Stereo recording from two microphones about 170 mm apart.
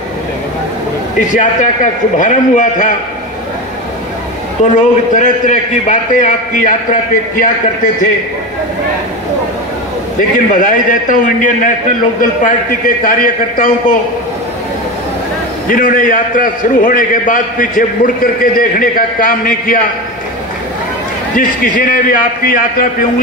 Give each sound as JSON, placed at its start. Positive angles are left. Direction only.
{"t": 1.1, "sound": "a man's voice", "side_deg": 50}
{"t": 4.7, "sound": "a man's voice", "side_deg": 45}
{"t": 10.3, "sound": "a man's voice", "side_deg": 50}
{"t": 15.7, "sound": "a man's voice", "side_deg": 50}
{"t": 21.4, "sound": "a man's voice", "side_deg": 55}